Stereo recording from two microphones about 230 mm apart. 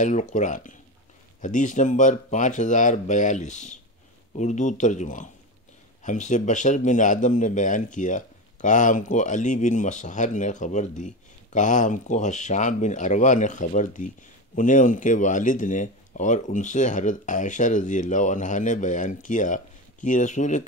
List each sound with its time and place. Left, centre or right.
0.0 s speech: left